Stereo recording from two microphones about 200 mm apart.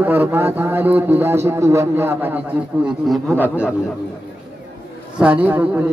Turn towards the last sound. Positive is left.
turn(degrees=-10)  # may be behind; listen again after turning